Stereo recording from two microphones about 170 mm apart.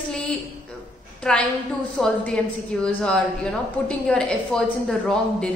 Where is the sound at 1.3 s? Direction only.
5° left (ahead or behind).